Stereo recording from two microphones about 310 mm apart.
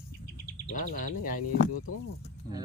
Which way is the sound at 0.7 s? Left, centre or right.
Left.